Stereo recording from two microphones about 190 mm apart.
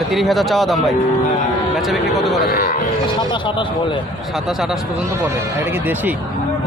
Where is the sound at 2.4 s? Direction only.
50° left (ahead or behind).